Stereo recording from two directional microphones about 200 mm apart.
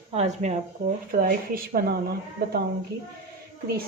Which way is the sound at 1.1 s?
45° right (ahead or behind).